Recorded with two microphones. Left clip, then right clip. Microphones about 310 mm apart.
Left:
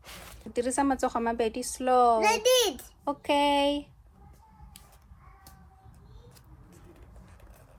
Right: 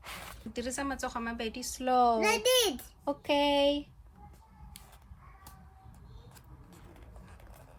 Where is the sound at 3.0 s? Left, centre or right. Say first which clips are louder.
Left 3 dB; left.